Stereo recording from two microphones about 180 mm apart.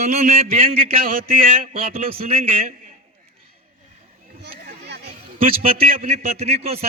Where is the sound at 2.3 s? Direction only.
35° right (ahead or behind).